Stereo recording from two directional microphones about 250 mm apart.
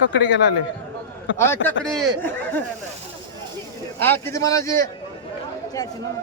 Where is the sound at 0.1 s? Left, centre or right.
Left.